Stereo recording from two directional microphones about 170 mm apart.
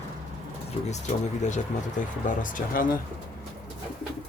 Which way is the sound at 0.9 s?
45° left (ahead or behind).